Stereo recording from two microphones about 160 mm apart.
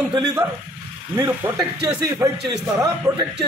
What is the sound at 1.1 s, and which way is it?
Speech, 15° right (ahead or behind).